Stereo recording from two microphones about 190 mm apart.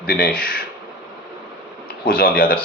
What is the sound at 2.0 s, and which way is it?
Speech, 50° left (ahead or behind).